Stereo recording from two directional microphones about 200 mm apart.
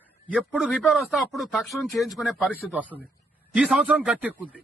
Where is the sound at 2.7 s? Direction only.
10° right (ahead or behind).